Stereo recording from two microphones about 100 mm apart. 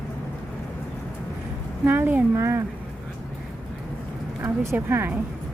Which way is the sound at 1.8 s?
25° right (ahead or behind).